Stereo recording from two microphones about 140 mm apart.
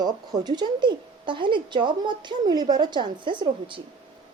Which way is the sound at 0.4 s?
30° right (ahead or behind).